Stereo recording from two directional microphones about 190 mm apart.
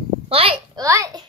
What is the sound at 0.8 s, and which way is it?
Speech, 15° right (ahead or behind).